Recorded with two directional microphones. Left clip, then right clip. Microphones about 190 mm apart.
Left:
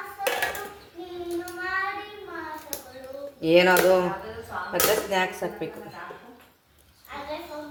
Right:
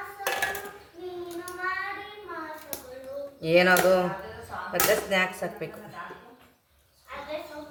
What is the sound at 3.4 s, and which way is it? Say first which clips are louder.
Speech: left 2 dB; 15° left (ahead or behind).